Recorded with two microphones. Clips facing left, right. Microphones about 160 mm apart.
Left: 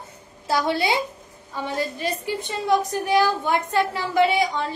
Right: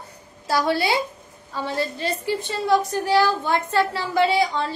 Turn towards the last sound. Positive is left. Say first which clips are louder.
# even
turn(degrees=15)  # may be behind; listen again after turning